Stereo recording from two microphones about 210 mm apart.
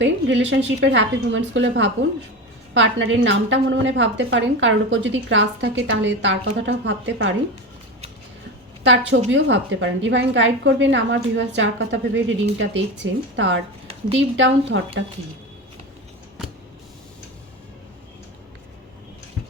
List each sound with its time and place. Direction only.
0.0 s a woman's voice: 60° right (ahead or behind)
8.8 s a woman's voice: 60° right (ahead or behind)